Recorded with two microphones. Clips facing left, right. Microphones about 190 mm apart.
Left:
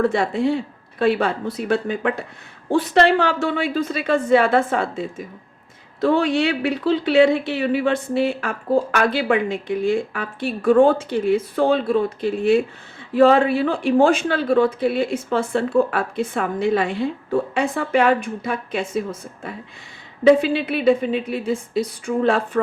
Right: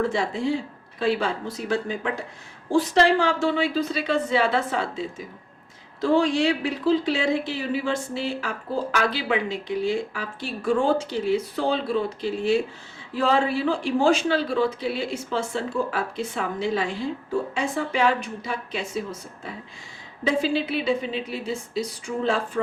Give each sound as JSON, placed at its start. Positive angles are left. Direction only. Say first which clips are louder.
{"t": 0.0, "sound": "a woman's voice", "louder": "left 5 dB", "side_deg": 60}
{"t": 20.2, "sound": "a woman's voice", "louder": "left 8 dB", "side_deg": 60}